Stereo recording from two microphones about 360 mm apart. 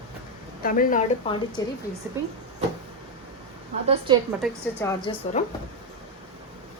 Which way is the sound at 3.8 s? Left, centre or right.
Centre.